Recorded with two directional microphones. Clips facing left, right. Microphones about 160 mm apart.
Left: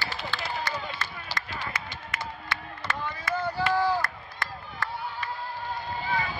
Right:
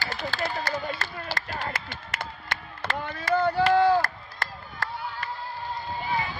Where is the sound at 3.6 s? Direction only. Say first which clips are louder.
Right 5 dB; 60° right (ahead or behind).